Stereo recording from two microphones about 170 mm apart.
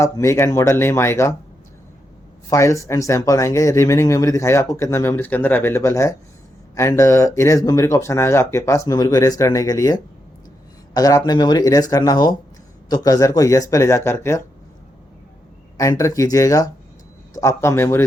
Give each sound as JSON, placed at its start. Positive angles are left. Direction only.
{"t": 0.0, "sound": "speech", "side_deg": 15}
{"t": 2.5, "sound": "speech", "side_deg": 15}
{"t": 15.8, "sound": "speech", "side_deg": 20}